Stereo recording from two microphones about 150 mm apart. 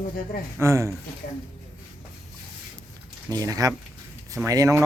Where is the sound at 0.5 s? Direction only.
20° right (ahead or behind).